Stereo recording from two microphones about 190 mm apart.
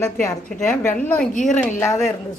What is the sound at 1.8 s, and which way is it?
Speech, 15° left (ahead or behind).